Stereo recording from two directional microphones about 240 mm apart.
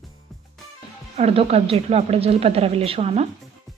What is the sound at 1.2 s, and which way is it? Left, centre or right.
A woman's voice, right.